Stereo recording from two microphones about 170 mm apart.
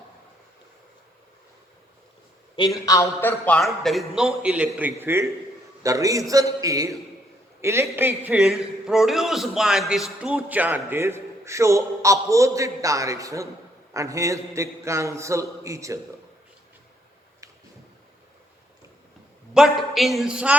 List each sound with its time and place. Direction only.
2.6 s a man's voice: 20° left (ahead or behind); by 16.0 s 20° right (ahead or behind)
19.5 s a man's voice: centre (ahead or behind)